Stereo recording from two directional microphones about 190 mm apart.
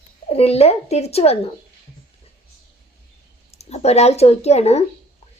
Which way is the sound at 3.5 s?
35° left (ahead or behind).